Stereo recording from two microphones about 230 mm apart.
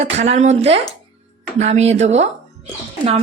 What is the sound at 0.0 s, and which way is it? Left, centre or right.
A woman's voice, right.